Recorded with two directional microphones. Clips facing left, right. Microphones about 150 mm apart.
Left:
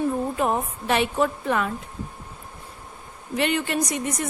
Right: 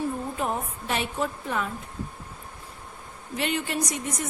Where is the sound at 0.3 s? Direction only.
65° left (ahead or behind).